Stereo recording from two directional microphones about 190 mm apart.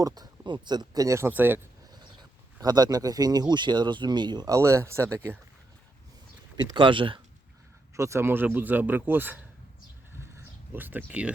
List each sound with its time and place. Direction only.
0.0 s speech: 20° right (ahead or behind)
2.6 s speech: 20° right (ahead or behind)
6.7 s speech: 25° right (ahead or behind)
7.9 s speech: 15° right (ahead or behind)
10.2 s a sound: 10° right (ahead or behind)